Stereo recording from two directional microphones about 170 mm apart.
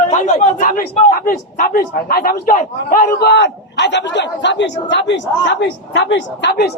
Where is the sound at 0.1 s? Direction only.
45° left (ahead or behind).